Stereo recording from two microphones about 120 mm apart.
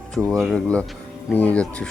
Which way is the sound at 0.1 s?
5° left (ahead or behind).